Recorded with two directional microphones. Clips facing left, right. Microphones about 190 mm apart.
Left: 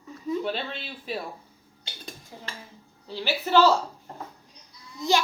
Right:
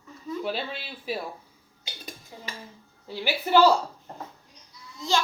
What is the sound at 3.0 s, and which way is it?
Speech, 15° right (ahead or behind).